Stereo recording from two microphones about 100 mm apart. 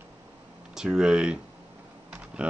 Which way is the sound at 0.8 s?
5° right (ahead or behind).